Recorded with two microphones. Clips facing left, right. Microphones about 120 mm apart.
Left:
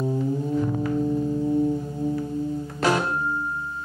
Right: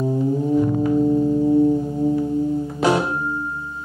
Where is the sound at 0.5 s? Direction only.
15° right (ahead or behind).